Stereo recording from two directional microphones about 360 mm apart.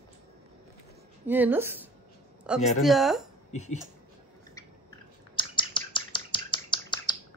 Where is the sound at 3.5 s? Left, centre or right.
Centre.